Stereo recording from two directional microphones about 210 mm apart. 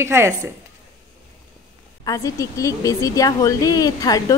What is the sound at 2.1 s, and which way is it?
Speech, 15° left (ahead or behind).